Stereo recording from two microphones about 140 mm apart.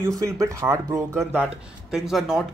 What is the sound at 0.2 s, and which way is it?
Speech, 20° right (ahead or behind).